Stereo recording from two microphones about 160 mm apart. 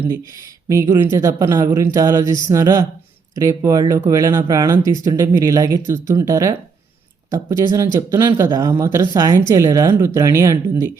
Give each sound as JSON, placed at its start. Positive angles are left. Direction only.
{"t": 0.7, "sound": "speech", "side_deg": -15}